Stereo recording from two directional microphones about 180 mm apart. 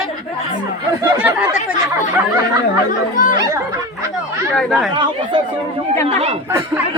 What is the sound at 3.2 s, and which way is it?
Speech, 50° left (ahead or behind).